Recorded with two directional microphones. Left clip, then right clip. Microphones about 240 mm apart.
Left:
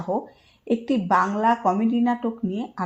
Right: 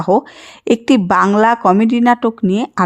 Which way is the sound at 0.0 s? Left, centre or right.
Right.